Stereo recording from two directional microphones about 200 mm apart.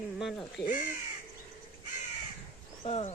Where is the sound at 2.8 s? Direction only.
30° left (ahead or behind).